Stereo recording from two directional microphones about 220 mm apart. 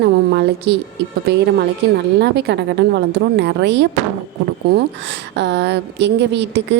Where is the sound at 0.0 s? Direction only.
50° right (ahead or behind).